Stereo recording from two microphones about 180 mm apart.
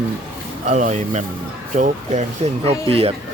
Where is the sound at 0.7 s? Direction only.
40° right (ahead or behind).